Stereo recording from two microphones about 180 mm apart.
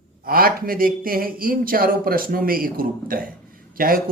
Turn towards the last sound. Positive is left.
turn(degrees=-50)  # may be behind; listen again after turning